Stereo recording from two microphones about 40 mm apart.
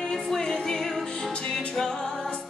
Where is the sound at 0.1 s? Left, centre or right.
Centre.